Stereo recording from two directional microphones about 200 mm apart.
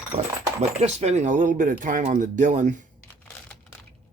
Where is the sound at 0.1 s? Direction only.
35° right (ahead or behind).